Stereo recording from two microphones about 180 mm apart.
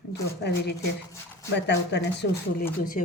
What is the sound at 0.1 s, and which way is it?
Speech, 70° left (ahead or behind).